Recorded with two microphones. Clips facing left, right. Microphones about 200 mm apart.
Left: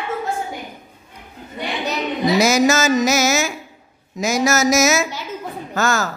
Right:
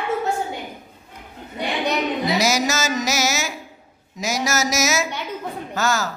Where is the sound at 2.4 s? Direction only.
50° left (ahead or behind).